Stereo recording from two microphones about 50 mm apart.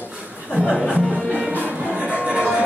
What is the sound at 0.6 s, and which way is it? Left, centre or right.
Speech, right.